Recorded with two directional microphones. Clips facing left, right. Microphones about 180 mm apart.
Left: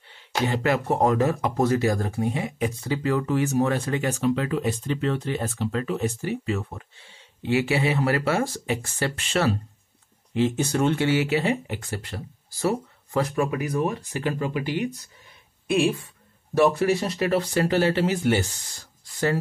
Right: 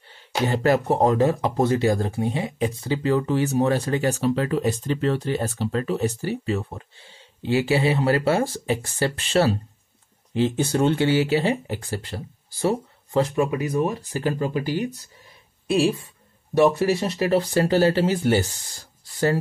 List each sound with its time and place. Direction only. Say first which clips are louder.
0.5 s speech: right 4 dB; 35° right (ahead or behind)